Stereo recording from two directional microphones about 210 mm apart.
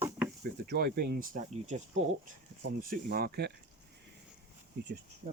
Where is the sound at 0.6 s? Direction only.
45° right (ahead or behind).